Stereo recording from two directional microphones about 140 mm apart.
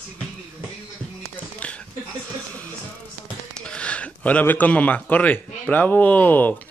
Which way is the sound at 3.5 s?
5° left (ahead or behind).